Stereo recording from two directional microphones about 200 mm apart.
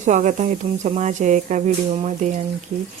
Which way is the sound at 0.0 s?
35° right (ahead or behind).